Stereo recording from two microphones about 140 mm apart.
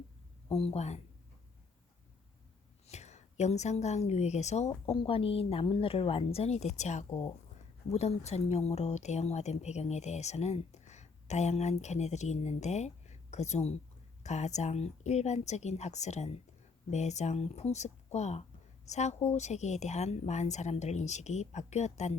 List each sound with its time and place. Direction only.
0.4 s speech: 45° left (ahead or behind)
2.8 s a woman's voice: 55° left (ahead or behind)